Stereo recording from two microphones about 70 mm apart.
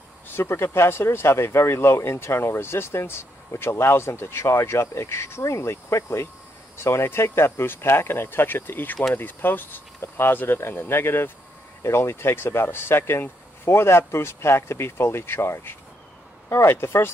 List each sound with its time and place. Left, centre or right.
0.3 s speech: left